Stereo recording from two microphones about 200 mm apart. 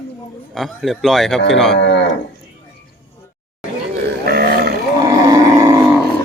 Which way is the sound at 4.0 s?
55° right (ahead or behind).